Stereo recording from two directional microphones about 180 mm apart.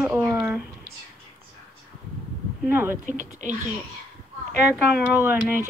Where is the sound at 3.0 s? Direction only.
45° right (ahead or behind).